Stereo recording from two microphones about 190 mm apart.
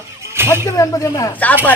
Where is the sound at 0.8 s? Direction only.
15° left (ahead or behind).